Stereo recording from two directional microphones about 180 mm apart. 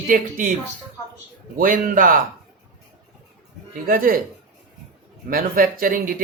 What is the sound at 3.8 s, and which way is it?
Speech, 50° right (ahead or behind).